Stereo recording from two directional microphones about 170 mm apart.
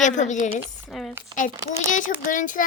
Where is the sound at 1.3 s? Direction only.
30° right (ahead or behind).